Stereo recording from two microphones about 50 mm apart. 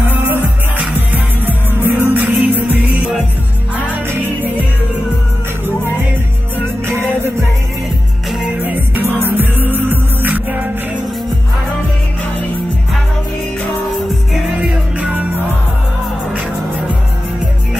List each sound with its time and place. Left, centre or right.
0.9 s music: right
8.6 s music: right
14.6 s music: right